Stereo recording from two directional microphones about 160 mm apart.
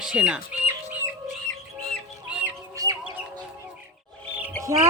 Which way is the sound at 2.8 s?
20° right (ahead or behind).